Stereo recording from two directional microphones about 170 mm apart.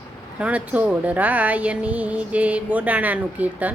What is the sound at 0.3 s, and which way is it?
Speech, 5° right (ahead or behind).